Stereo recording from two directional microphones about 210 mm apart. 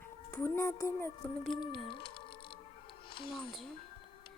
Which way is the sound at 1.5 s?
20° left (ahead or behind).